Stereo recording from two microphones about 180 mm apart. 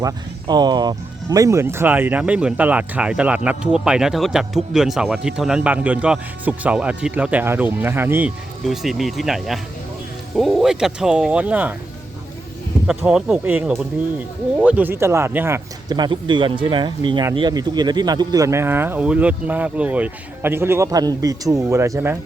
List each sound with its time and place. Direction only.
0.0 s speech: 25° right (ahead or behind)
8.6 s speech: centre (ahead or behind)
12.9 s speech: 5° right (ahead or behind)